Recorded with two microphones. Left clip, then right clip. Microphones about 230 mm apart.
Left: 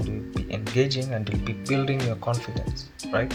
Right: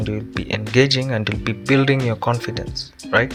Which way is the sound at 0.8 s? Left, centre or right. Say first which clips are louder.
Right 8 dB; right.